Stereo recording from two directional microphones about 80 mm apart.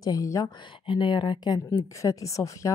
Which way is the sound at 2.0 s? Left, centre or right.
Left.